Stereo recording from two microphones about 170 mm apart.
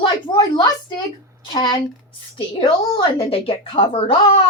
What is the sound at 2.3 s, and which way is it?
A woman's voice, 30° left (ahead or behind).